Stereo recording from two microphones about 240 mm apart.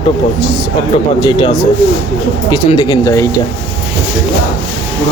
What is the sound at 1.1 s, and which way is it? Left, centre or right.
Speech, centre.